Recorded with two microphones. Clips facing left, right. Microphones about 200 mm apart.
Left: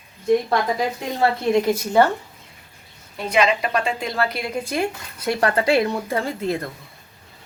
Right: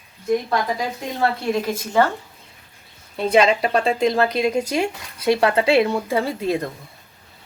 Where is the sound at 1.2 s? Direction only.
15° left (ahead or behind).